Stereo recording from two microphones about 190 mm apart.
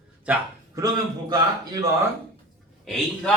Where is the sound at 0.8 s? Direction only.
20° right (ahead or behind).